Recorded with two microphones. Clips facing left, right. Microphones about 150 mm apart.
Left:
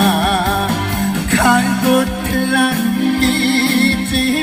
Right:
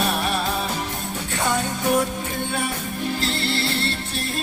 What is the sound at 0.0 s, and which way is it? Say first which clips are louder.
Music: left 9 dB; 60° left (ahead or behind).